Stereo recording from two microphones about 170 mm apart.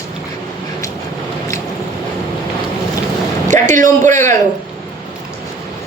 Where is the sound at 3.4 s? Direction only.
45° right (ahead or behind).